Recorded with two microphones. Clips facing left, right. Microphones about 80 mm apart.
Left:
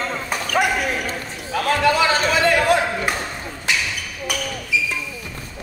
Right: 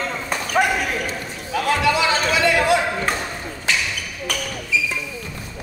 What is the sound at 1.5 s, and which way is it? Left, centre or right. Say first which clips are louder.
Chatter: left 1 dB; left.